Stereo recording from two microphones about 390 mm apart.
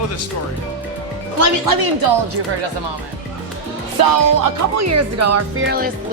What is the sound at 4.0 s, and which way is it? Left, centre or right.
Speech, right.